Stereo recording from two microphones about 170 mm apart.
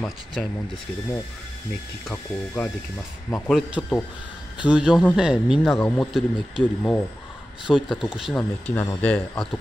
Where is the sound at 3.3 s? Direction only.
Centre (ahead or behind).